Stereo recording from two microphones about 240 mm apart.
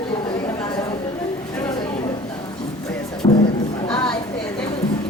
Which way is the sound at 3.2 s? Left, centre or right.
Centre.